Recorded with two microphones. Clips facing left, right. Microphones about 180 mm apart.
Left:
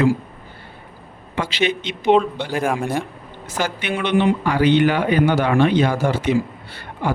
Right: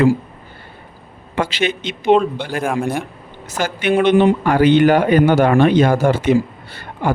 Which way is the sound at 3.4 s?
45° right (ahead or behind).